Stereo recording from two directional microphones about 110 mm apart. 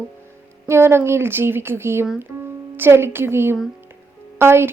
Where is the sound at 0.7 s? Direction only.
20° right (ahead or behind).